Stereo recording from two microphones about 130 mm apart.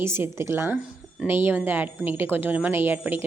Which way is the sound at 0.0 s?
20° right (ahead or behind).